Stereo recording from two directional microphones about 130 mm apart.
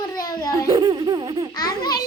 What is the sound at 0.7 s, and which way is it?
Speech, 35° right (ahead or behind).